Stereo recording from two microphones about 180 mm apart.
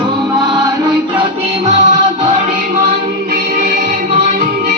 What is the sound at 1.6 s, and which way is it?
Music, 40° right (ahead or behind).